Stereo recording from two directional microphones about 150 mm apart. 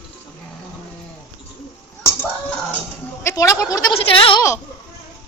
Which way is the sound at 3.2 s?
20° left (ahead or behind).